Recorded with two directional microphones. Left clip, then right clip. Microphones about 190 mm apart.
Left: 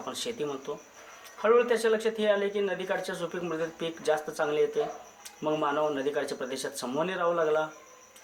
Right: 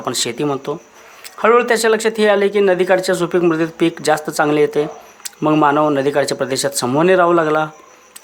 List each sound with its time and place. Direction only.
0.0 s a man's voice: 50° right (ahead or behind)